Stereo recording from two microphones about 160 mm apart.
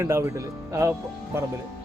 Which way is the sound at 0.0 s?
15° right (ahead or behind).